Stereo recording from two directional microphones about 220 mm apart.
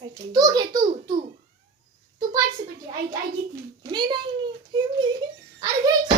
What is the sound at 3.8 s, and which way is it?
A woman's voice, 20° right (ahead or behind).